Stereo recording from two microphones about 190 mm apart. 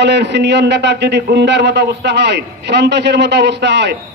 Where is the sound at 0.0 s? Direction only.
65° right (ahead or behind).